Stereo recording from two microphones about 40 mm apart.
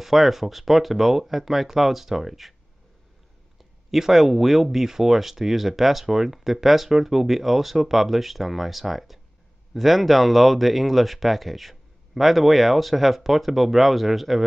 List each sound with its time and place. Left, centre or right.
0.0 s speech: centre
3.9 s speech: centre